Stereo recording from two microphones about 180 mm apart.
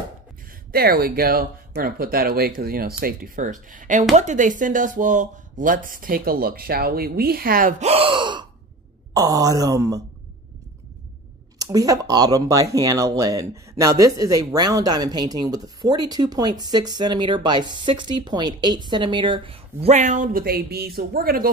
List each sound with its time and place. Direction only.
0.7 s speech: 55° right (ahead or behind)
7.8 s speech: 35° right (ahead or behind)
11.5 s speech: 20° right (ahead or behind); by 21.5 s 55° right (ahead or behind)